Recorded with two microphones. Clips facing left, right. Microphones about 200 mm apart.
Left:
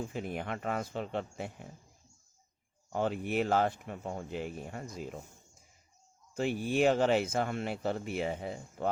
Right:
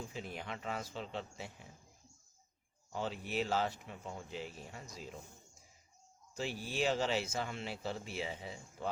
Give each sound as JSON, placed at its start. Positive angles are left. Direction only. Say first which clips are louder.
{"t": 0.0, "sound": "speech", "louder": "left 7 dB", "side_deg": 55}
{"t": 2.9, "sound": "speech", "louder": "left 7 dB", "side_deg": 55}
{"t": 6.3, "sound": "speech", "louder": "left 9 dB", "side_deg": 55}